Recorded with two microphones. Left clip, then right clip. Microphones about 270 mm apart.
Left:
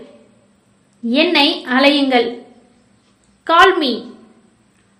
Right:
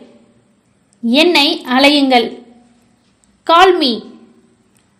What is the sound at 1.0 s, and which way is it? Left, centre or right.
A woman's voice, right.